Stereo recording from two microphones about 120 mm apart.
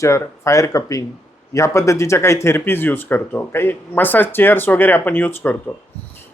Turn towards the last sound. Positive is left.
turn(degrees=15)  # may be behind; listen again after turning